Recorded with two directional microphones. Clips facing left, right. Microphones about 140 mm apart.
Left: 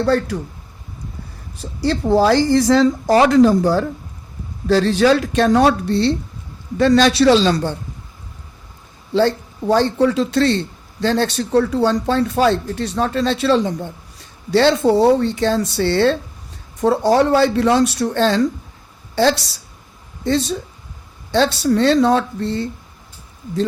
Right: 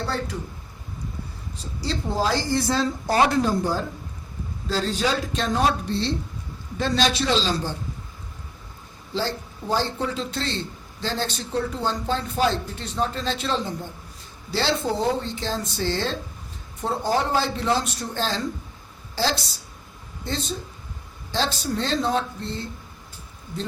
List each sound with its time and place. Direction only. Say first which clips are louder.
0.0 s speech: left 11 dB; 75° left (ahead or behind)
1.9 s speech: left 10 dB; 80° left
4.7 s speech: left 11 dB; 75° left (ahead or behind)
9.7 s speech: left 10 dB; 85° left
16.8 s speech: left 10 dB; 85° left
20.2 s speech: left 12 dB; 75° left (ahead or behind)
21.6 s speech: left 11 dB; 80° left